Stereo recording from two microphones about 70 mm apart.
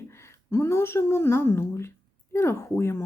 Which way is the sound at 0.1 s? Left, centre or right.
Left.